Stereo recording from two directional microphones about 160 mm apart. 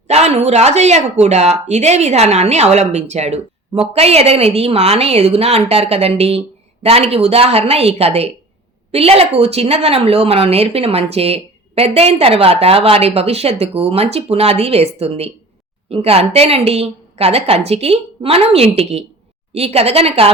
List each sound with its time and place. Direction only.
0.1 s a woman's voice: 40° right (ahead or behind)